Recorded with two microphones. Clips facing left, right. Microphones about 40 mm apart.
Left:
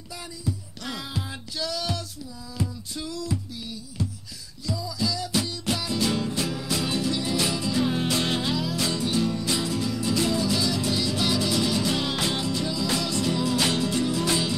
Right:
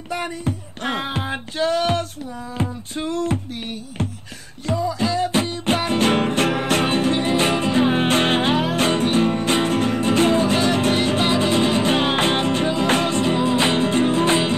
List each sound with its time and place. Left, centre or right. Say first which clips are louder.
0.1 s music: right 9 dB; right
4.6 s music: right 8 dB; right